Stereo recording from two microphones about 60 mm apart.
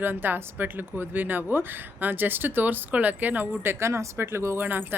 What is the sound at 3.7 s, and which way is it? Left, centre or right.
Speech, right.